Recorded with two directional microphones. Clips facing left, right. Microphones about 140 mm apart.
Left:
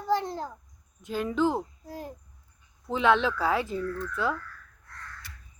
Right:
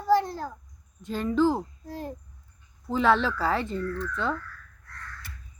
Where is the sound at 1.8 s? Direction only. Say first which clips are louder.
Right 3 dB; 10° left (ahead or behind).